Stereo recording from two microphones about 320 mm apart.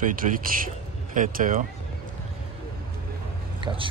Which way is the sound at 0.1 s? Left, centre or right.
Right.